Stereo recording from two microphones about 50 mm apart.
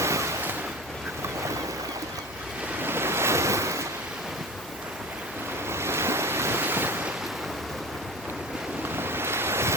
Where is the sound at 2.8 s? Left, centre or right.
Right.